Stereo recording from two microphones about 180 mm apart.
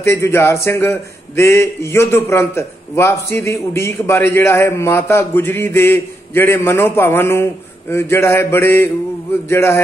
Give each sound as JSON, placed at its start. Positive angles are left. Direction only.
{"t": 0.0, "sound": "a man's voice", "side_deg": 15}